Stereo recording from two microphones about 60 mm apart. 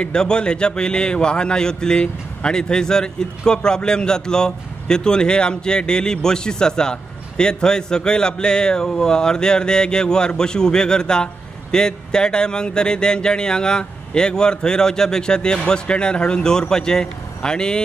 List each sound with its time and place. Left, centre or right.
0.0 s a man's voice: centre